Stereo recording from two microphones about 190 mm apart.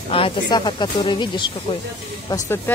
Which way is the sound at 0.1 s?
25° left (ahead or behind).